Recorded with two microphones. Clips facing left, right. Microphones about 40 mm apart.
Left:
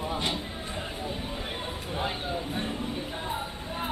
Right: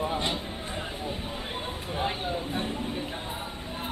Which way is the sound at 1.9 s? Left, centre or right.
Centre.